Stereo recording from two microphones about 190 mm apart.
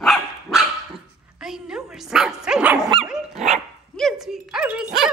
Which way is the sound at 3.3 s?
35° right (ahead or behind).